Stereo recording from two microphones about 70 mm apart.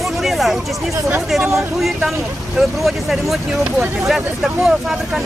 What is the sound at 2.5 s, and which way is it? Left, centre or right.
Speech, centre.